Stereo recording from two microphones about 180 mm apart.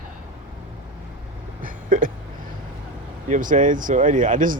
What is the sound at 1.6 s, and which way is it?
Hiccup, 45° right (ahead or behind).